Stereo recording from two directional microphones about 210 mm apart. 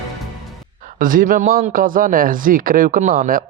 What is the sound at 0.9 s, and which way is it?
A man's voice, 40° right (ahead or behind).